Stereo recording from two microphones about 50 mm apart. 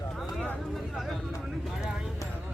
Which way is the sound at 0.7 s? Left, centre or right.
Centre.